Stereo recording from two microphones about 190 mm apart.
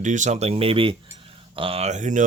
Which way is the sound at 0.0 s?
40° right (ahead or behind).